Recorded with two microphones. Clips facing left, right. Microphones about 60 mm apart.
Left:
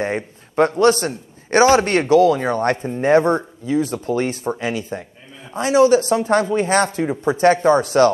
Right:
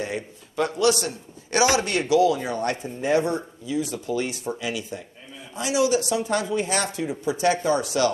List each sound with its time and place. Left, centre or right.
0.0 s a man's voice: left